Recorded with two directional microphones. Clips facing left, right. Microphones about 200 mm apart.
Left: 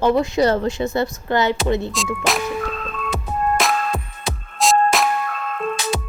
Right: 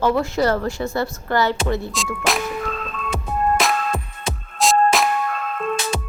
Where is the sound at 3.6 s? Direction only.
Centre (ahead or behind).